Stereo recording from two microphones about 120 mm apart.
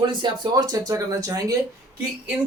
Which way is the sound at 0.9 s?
30° right (ahead or behind).